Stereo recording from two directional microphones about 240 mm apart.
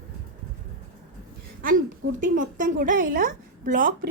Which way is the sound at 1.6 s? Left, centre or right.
Right.